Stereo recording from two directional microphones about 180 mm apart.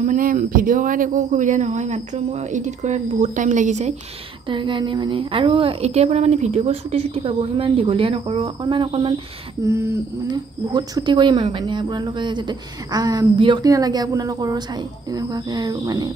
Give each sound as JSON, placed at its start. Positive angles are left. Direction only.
{"t": 0.0, "sound": "speech", "side_deg": -50}
{"t": 4.5, "sound": "a woman's voice", "side_deg": -25}
{"t": 9.7, "sound": "a woman's voice", "side_deg": -15}